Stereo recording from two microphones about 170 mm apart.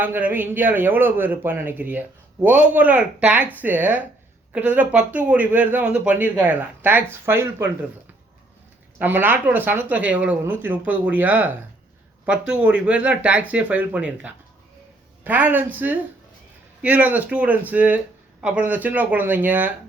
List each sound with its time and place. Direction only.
0.0 s speech: 10° right (ahead or behind)
9.0 s speech: 10° right (ahead or behind)